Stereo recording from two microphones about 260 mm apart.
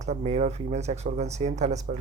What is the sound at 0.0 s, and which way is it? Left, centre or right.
Speech, right.